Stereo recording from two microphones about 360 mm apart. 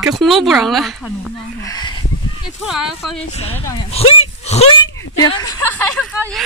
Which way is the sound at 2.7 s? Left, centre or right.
Centre.